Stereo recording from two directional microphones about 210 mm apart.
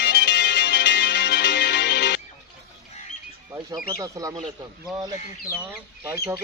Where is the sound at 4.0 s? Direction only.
15° right (ahead or behind).